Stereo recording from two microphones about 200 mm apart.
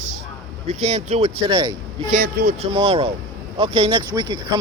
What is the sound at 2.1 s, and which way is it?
Speech, 45° right (ahead or behind).